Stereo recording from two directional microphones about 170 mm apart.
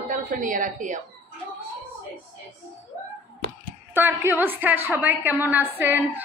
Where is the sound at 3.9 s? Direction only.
10° right (ahead or behind).